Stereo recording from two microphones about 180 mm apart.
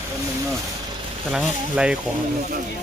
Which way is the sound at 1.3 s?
5° right (ahead or behind).